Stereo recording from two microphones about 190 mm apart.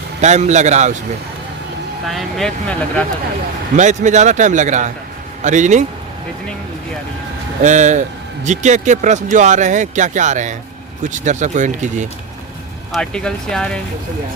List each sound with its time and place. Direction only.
0.2 s speech: 35° right (ahead or behind)
2.0 s speech: centre (ahead or behind)
3.8 s a man's voice: 40° right (ahead or behind)
7.6 s speech: 40° right (ahead or behind)
12.9 s speech: 5° left (ahead or behind)